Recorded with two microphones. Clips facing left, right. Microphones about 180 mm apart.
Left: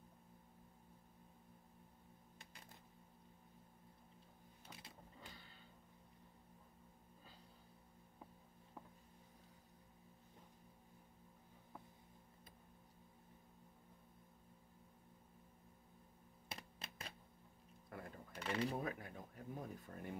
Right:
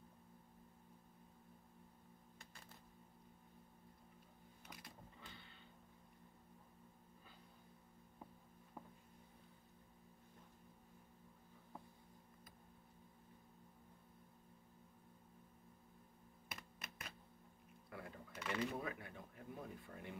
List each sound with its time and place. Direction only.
4.6 s printer: 25° left (ahead or behind)
5.2 s a sound: 35° left (ahead or behind)
16.4 s computer keyboard: 30° left (ahead or behind)
17.8 s cash register: 45° left (ahead or behind)
18.4 s speech: 35° left (ahead or behind)